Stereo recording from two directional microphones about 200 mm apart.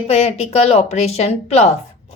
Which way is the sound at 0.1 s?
30° left (ahead or behind).